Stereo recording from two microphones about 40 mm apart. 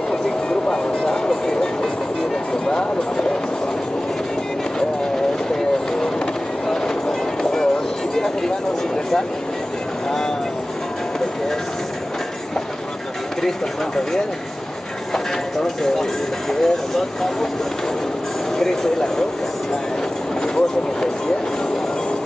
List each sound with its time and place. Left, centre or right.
0.1 s vehicle: left
2.6 s a sound: left
6.7 s vehicle: centre
15.1 s clip-clop: centre
16.5 s speech: centre
18.6 s speech: centre